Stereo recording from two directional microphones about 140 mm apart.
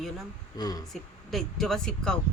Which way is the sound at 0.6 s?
25° left (ahead or behind).